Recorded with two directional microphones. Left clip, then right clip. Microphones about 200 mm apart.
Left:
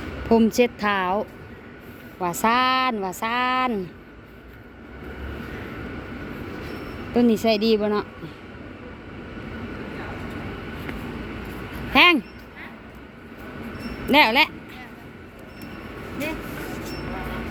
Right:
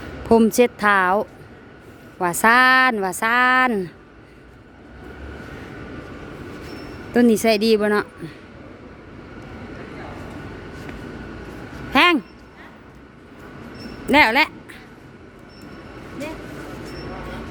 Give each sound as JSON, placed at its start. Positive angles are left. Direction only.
{"t": 0.3, "sound": "speech", "side_deg": -30}
{"t": 7.1, "sound": "speech", "side_deg": -35}
{"t": 11.9, "sound": "a sound", "side_deg": -20}
{"t": 14.1, "sound": "speech", "side_deg": -25}